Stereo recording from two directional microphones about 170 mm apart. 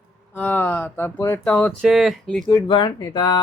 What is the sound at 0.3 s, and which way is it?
Speech, 10° left (ahead or behind).